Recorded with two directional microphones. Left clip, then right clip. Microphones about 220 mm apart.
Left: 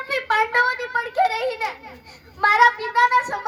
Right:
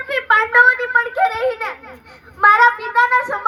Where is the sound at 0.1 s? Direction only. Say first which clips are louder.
Right 6 dB; 55° left (ahead or behind).